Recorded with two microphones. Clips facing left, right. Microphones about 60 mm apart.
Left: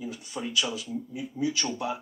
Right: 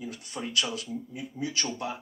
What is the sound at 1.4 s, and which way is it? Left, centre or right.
Speech, right.